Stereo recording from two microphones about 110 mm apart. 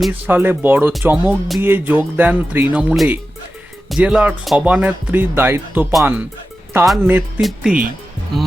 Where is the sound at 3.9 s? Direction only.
5° right (ahead or behind).